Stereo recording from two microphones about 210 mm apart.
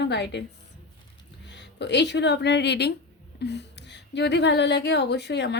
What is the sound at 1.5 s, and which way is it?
Speech, 55° left (ahead or behind).